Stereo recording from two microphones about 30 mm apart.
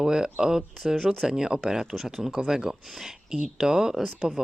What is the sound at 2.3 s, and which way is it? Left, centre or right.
Speech, right.